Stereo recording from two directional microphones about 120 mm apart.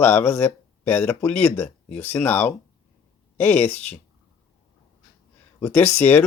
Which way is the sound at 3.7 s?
65° left (ahead or behind).